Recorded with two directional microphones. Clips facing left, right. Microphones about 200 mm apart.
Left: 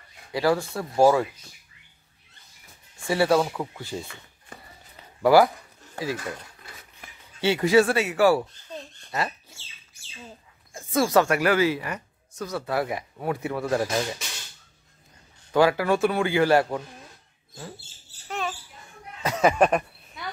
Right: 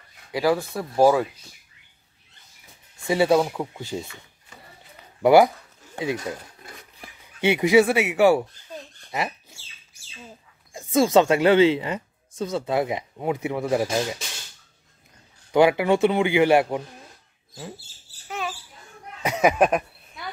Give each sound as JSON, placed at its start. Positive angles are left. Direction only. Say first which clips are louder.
{"t": 0.3, "sound": "speech", "louder": "right 1 dB", "side_deg": -15}
{"t": 3.1, "sound": "speech", "louder": "right 2 dB", "side_deg": -15}
{"t": 5.2, "sound": "speech", "louder": "right 2 dB", "side_deg": -20}
{"t": 7.4, "sound": "speech", "louder": "right 2 dB", "side_deg": -15}
{"t": 10.7, "sound": "speech", "louder": "right 3 dB", "side_deg": -20}
{"t": 15.5, "sound": "speech", "louder": "right 3 dB", "side_deg": -20}
{"t": 18.3, "sound": "a sound", "louder": "even", "side_deg": 0}
{"t": 19.2, "sound": "a sound", "louder": "right 1 dB", "side_deg": -15}